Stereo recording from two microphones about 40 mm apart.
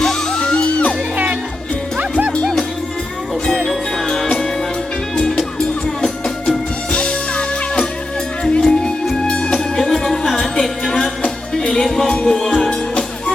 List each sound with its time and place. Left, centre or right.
0.0 s music: centre; by 0.9 s left
1.1 s music: right
2.4 s music: centre
5.5 s music: centre
9.7 s music: centre
11.6 s music: centre